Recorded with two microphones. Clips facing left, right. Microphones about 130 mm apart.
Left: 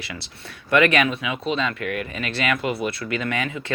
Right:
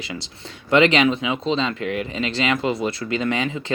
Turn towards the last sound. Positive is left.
turn(degrees=-25)  # may be behind; listen again after turning